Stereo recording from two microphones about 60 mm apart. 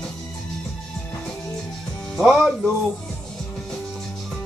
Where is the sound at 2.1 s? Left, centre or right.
Centre.